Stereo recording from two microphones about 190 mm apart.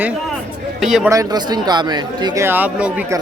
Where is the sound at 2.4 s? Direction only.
10° right (ahead or behind).